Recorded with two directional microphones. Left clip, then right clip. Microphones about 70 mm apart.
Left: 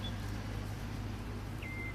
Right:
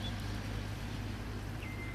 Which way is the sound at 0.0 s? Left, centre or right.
Right.